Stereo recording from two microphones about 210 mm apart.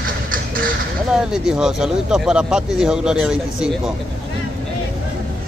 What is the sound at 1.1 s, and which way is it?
Speech, 5° right (ahead or behind).